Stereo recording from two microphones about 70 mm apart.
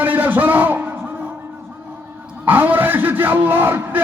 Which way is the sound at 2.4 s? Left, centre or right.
Right.